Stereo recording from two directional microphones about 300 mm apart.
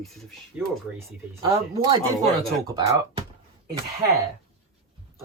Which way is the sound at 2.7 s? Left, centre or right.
Centre.